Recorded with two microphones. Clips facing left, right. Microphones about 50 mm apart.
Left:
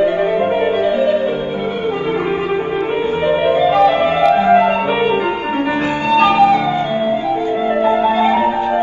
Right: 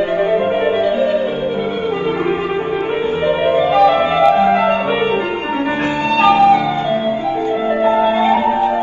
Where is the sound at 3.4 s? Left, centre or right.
Right.